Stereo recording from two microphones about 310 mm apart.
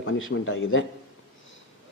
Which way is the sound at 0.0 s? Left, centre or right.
Left.